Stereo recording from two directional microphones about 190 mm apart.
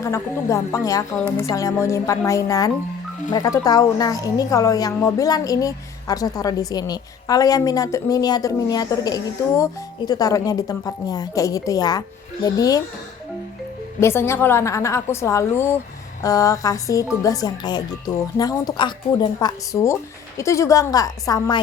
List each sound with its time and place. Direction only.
0.0 s a woman's voice: 15° left (ahead or behind)
14.0 s a woman's voice: 15° left (ahead or behind)